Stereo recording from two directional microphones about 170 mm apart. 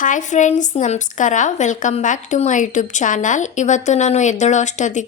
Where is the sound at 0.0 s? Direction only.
45° left (ahead or behind).